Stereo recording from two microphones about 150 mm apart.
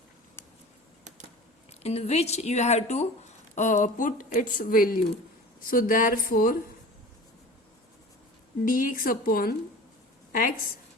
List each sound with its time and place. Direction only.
1.8 s speech: 45° left (ahead or behind); by 6.6 s 70° left (ahead or behind)
8.6 s speech: 65° left (ahead or behind)